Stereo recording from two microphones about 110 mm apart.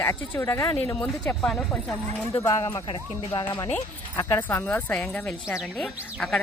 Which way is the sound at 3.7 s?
20° left (ahead or behind).